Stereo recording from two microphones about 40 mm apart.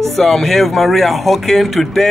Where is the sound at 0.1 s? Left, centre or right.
Centre.